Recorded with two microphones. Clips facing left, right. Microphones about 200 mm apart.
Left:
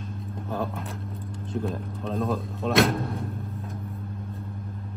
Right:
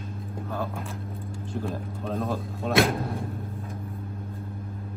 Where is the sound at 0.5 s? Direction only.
Centre (ahead or behind).